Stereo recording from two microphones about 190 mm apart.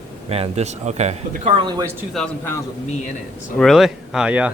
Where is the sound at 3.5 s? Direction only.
Centre (ahead or behind).